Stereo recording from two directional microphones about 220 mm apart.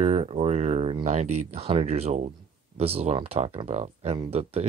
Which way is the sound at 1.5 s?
25° right (ahead or behind).